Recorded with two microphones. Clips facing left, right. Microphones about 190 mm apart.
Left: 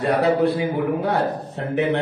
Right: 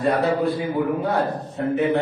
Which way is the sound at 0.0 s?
70° left (ahead or behind).